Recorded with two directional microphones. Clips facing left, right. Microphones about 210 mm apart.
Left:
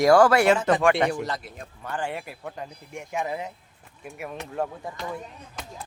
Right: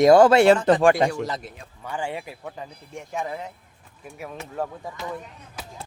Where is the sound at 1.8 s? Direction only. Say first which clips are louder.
Right 1 dB; 10° right (ahead or behind).